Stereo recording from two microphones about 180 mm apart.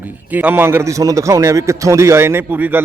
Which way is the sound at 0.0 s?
10° right (ahead or behind).